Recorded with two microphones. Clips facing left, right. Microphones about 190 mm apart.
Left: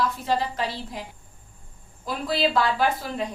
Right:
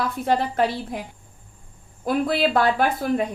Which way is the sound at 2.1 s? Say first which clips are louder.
Right 4 dB; 55° right (ahead or behind).